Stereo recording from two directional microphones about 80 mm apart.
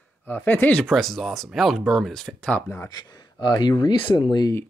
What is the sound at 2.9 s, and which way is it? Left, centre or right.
Speech, left.